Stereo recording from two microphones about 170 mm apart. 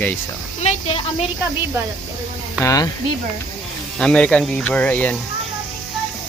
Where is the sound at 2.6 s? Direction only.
20° left (ahead or behind).